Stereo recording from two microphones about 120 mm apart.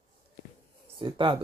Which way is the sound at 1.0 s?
45° right (ahead or behind).